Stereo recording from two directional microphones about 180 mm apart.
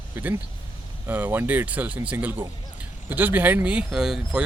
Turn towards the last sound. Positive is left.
turn(degrees=-5)  # may be behind; listen again after turning